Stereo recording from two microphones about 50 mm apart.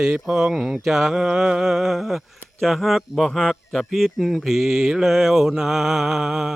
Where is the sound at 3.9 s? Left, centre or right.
Centre.